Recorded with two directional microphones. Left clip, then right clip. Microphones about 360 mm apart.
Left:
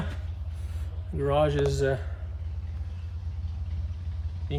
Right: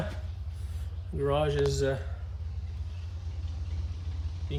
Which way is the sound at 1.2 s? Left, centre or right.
Centre.